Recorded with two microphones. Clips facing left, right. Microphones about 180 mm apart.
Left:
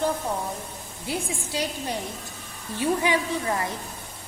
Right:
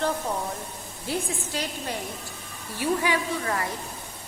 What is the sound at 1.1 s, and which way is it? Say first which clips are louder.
A woman's voice: even; 15° left (ahead or behind).